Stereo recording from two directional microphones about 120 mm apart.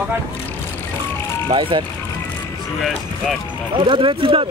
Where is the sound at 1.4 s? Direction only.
45° right (ahead or behind).